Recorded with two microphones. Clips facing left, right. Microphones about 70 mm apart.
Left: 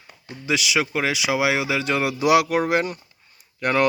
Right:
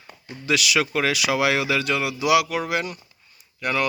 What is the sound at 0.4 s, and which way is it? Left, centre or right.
Speech, centre.